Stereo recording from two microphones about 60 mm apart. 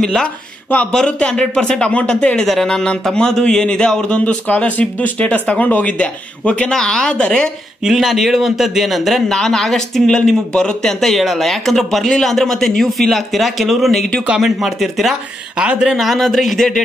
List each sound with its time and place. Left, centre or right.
0.0 s a man's voice: centre
7.8 s speech: centre
9.3 s speech: centre
15.5 s speech: centre
16.0 s speech: centre